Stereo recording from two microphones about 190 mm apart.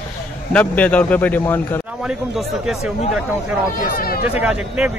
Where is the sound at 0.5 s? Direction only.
5° left (ahead or behind).